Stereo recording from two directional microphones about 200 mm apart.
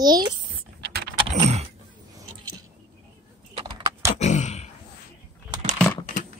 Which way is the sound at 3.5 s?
20° right (ahead or behind).